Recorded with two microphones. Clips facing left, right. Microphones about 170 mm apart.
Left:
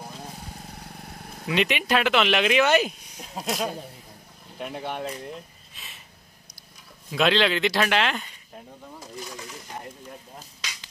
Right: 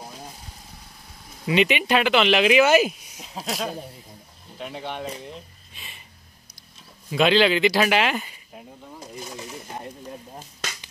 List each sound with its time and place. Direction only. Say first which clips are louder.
0.6 s vehicle: left 6 dB; 65° left (ahead or behind)
1.5 s speech: right 3 dB; centre (ahead or behind)
7.1 s speech: right 3 dB; centre (ahead or behind)
9.0 s bird: right 2 dB; 20° right (ahead or behind)